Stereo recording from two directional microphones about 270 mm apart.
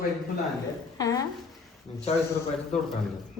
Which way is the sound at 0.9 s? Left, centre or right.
Centre.